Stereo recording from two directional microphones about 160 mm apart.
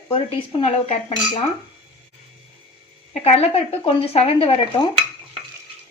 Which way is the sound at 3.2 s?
40° left (ahead or behind).